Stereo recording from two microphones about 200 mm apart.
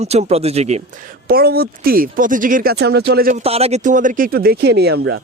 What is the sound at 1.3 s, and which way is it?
A man's voice, 50° right (ahead or behind).